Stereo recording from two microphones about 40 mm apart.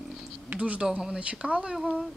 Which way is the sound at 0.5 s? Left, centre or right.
Right.